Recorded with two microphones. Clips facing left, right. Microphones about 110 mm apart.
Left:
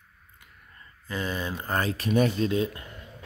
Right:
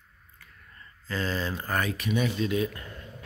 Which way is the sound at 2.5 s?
25° left (ahead or behind).